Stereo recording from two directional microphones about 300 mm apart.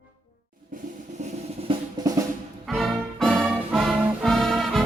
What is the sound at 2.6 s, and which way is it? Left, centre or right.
Music, centre.